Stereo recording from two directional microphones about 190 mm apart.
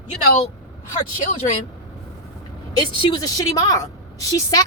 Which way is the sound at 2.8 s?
25° left (ahead or behind).